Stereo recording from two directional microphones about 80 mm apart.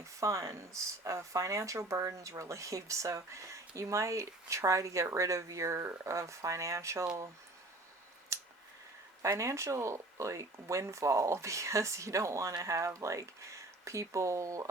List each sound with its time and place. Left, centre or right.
0.0 s speech: right
9.2 s speech: right